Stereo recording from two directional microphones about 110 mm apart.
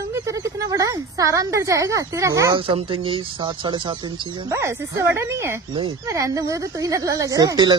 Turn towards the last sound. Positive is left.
turn(degrees=-30)  # may be behind; listen again after turning